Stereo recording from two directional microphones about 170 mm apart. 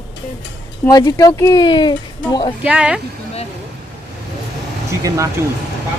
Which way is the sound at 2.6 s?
5° right (ahead or behind).